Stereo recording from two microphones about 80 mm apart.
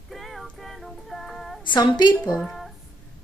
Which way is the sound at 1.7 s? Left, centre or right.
Left.